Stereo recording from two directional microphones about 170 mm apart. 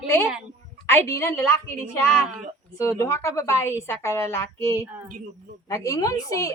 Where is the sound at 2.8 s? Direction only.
15° left (ahead or behind).